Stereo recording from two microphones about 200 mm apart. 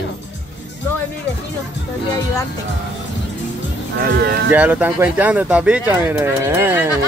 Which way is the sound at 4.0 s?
50° right (ahead or behind).